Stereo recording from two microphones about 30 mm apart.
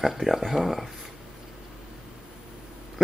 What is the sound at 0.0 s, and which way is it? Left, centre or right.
Speech, centre.